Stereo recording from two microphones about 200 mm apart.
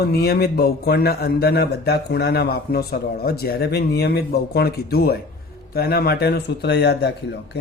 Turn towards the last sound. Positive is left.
turn(degrees=55)  # may be behind; listen again after turning